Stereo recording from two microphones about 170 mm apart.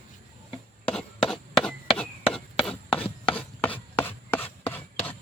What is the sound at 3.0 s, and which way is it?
Chopping, 35° left (ahead or behind).